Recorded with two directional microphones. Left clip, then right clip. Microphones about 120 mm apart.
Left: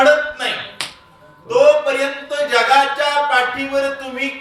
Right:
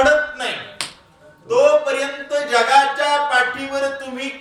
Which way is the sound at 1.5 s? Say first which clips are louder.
Left 2 dB; 15° left (ahead or behind).